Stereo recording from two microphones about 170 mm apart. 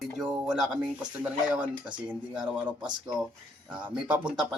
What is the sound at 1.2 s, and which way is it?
Speech, 5° right (ahead or behind).